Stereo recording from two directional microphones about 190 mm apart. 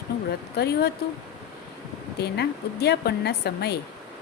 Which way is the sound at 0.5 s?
60° left (ahead or behind).